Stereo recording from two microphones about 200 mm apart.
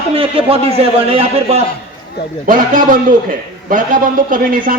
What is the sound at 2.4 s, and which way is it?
A man's voice, 45° right (ahead or behind).